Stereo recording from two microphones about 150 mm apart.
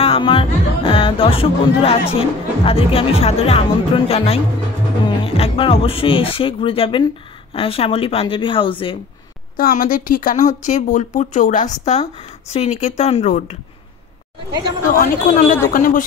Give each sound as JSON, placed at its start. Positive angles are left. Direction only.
{"t": 0.0, "sound": "speech", "side_deg": 35}
{"t": 9.6, "sound": "speech", "side_deg": 70}
{"t": 14.9, "sound": "a woman's voice", "side_deg": 60}